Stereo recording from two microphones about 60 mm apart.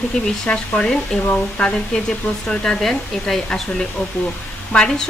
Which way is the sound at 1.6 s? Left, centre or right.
Centre.